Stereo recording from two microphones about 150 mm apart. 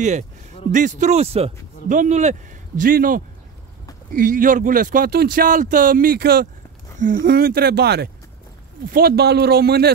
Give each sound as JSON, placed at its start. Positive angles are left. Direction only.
{"t": 0.7, "sound": "speech", "side_deg": -55}
{"t": 2.8, "sound": "speech", "side_deg": -70}
{"t": 7.0, "sound": "speech", "side_deg": -75}